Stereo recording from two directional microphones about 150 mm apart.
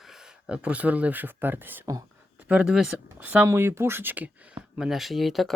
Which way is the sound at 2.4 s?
5° right (ahead or behind).